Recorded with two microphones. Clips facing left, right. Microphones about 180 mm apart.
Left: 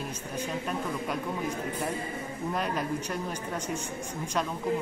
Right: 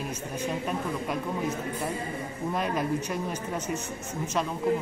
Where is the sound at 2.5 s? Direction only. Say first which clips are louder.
Right 2 dB; centre (ahead or behind).